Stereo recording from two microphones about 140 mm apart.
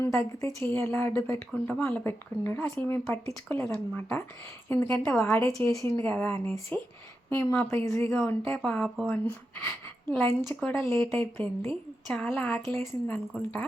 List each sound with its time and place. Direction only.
0.0 s speech: 20° left (ahead or behind)